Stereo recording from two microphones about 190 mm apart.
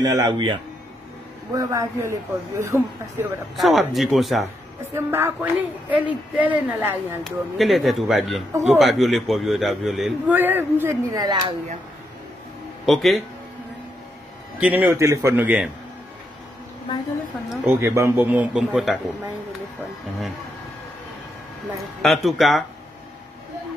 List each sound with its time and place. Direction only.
0.0 s speech: 20° right (ahead or behind)
3.5 s a man's voice: centre (ahead or behind)
4.9 s a man's voice: 10° right (ahead or behind)
12.8 s a man's voice: centre (ahead or behind)
14.6 s speech: 10° right (ahead or behind)
17.5 s speech: 10° right (ahead or behind)
22.0 s a man's voice: centre (ahead or behind)